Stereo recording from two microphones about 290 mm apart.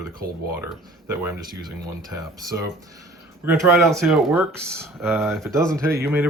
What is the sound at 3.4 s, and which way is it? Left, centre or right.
Speech, centre.